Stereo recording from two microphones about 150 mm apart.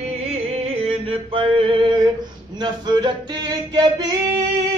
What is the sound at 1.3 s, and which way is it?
Male singing, 35° right (ahead or behind).